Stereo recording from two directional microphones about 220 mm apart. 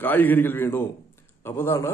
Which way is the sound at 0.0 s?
10° left (ahead or behind).